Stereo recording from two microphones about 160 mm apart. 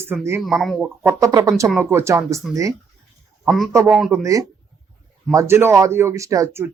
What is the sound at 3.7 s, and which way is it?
A man's voice, 20° right (ahead or behind).